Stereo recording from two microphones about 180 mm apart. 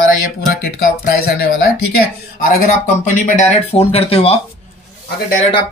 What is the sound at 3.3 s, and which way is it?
Speech, 35° left (ahead or behind).